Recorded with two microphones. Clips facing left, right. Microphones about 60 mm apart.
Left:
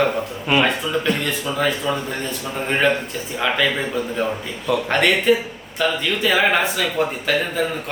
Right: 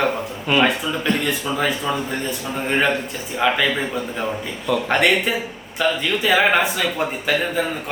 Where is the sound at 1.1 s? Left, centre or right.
Centre.